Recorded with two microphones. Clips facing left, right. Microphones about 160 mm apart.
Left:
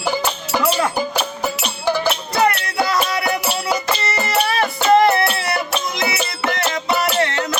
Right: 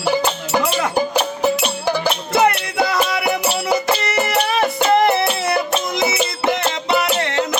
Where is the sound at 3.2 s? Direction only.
20° right (ahead or behind).